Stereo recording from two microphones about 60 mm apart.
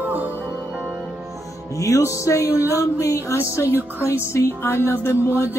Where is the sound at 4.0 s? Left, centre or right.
Left.